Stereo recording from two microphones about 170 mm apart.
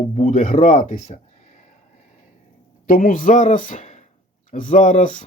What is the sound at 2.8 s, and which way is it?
A man's voice, 55° left (ahead or behind).